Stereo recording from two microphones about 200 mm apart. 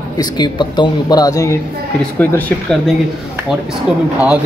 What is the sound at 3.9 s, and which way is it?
Speech, 5° right (ahead or behind).